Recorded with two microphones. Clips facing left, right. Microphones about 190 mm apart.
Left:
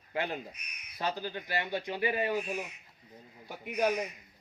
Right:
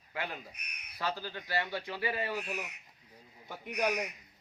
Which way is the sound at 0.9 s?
20° left (ahead or behind).